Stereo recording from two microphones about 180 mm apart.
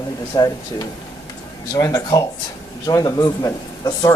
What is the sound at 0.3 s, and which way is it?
Speech, 20° left (ahead or behind).